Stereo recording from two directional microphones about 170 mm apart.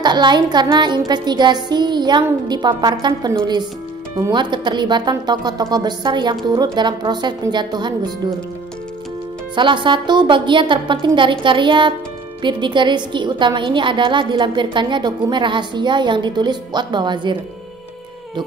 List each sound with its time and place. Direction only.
0.0 s a woman's voice: 25° right (ahead or behind)
9.6 s a woman's voice: 30° right (ahead or behind)